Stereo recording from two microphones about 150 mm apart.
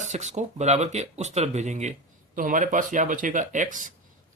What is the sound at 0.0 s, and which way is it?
Speech, 50° right (ahead or behind).